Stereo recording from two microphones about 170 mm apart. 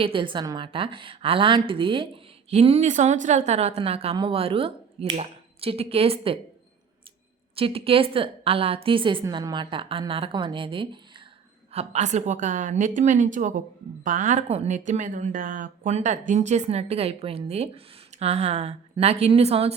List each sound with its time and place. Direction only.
0.0 s a woman's voice: 30° right (ahead or behind)
7.5 s a woman's voice: 35° right (ahead or behind)